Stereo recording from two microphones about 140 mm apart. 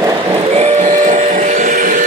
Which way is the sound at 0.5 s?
60° right (ahead or behind).